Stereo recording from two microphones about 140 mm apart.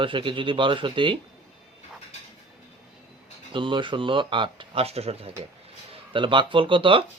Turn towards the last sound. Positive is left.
turn(degrees=-35)  # may be behind; listen again after turning